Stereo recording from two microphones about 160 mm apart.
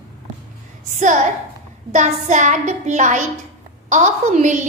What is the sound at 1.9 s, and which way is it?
A child's voice, 45° right (ahead or behind).